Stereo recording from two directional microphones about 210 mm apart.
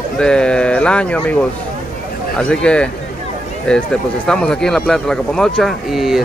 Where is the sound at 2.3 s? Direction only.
5° left (ahead or behind).